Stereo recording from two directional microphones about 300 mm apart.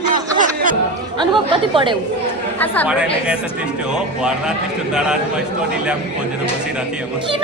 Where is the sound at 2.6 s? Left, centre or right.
Centre.